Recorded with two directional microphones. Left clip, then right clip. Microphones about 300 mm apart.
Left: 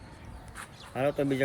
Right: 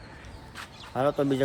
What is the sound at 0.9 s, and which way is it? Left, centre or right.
Speech, centre.